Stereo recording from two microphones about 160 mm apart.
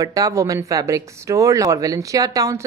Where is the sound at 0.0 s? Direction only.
20° right (ahead or behind).